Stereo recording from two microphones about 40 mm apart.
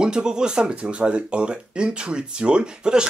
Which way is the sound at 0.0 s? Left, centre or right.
Right.